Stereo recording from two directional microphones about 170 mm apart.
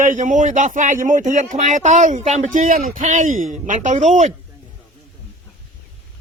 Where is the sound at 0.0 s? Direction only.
50° right (ahead or behind).